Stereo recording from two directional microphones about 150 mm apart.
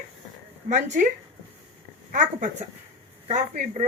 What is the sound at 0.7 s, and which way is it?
A woman's voice, 55° right (ahead or behind).